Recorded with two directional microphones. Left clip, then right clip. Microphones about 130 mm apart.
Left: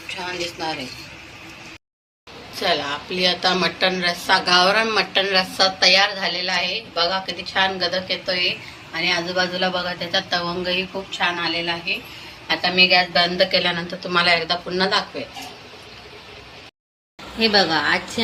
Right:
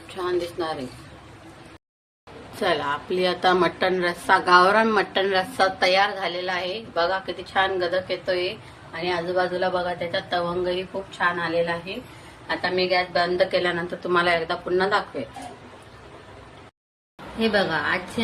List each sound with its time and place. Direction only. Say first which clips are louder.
2.6 s a woman's voice: left 2 dB; 60° right (ahead or behind); by 11.7 s 35° right (ahead or behind)
12.5 s a woman's voice: left 7 dB; 20° right (ahead or behind)
17.4 s a woman's voice: left 5 dB; 25° left (ahead or behind)